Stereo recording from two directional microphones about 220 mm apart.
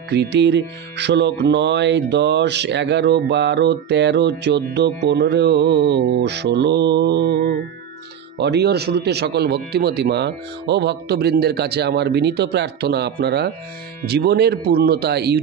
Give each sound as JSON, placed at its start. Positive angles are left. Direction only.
{"t": 0.1, "sound": "music", "side_deg": -50}